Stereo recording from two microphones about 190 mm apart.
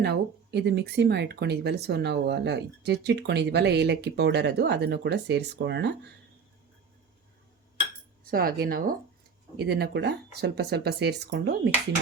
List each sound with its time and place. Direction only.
0.0 s speech: 60° right (ahead or behind)
8.2 s speech: 50° right (ahead or behind)